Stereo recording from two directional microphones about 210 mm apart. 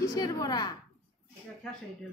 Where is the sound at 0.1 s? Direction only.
15° left (ahead or behind).